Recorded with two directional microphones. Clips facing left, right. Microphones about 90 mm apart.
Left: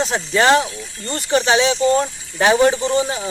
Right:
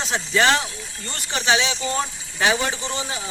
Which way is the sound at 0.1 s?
40° left (ahead or behind).